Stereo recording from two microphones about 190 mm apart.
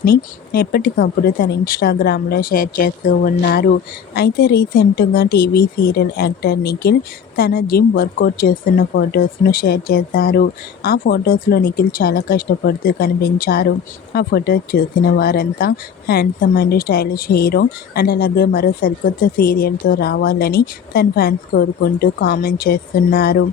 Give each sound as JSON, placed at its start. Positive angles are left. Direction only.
{"t": 0.0, "sound": "speech", "side_deg": 55}